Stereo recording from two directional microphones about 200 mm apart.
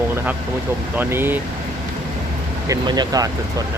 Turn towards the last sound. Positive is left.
turn(degrees=-20)  # may be behind; listen again after turning